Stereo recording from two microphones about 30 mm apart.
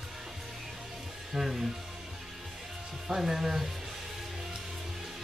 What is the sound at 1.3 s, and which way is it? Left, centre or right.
Music, centre.